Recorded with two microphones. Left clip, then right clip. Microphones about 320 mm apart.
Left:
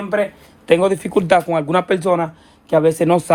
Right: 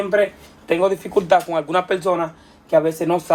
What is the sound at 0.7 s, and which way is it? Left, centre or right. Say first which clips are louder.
Speech: left 3 dB; left.